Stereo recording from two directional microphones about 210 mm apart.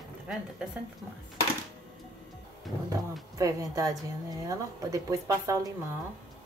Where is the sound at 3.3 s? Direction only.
15° right (ahead or behind).